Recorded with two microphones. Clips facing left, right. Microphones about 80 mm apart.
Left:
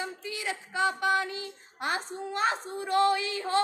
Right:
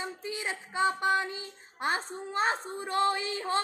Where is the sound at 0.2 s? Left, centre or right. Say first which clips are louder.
Left 1 dB; right.